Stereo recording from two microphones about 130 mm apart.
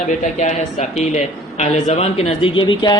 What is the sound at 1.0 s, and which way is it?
A man's voice, 60° left (ahead or behind).